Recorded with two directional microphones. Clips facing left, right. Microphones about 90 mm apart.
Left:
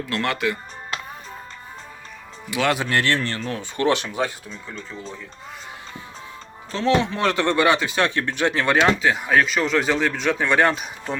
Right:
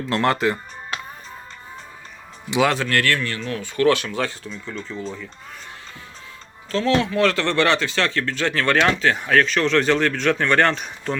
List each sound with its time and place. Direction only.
0.1 s speech: 35° right (ahead or behind)
2.7 s speech: 20° left (ahead or behind)
3.2 s speech: 35° left (ahead or behind)
3.6 s speech: 20° left (ahead or behind)
4.6 s speech: centre (ahead or behind)
6.7 s speech: 20° left (ahead or behind)